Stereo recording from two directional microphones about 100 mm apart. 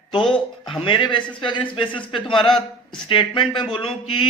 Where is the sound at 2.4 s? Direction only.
5° left (ahead or behind).